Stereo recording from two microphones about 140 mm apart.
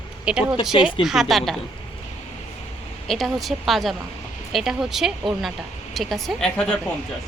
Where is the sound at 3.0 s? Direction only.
Centre (ahead or behind).